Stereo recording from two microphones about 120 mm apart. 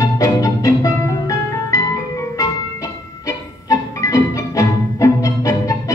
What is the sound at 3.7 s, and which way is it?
Music, 30° left (ahead or behind).